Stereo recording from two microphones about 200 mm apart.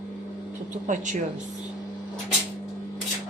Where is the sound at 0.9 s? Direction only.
40° right (ahead or behind).